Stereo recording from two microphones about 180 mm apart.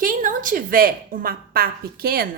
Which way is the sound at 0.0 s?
50° right (ahead or behind).